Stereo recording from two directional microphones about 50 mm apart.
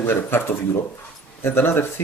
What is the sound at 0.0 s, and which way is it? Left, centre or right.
Speech, left.